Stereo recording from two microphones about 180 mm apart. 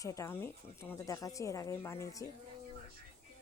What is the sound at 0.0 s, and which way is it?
Speech, 15° left (ahead or behind).